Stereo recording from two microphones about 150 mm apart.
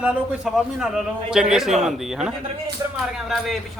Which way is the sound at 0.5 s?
5° right (ahead or behind).